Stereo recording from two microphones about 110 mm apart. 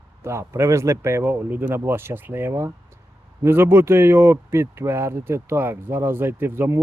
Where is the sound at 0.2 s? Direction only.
25° right (ahead or behind).